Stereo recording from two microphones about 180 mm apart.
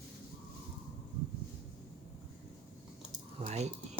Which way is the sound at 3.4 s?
35° right (ahead or behind).